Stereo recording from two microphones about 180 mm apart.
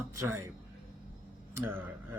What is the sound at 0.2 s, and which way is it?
Speech, 15° right (ahead or behind).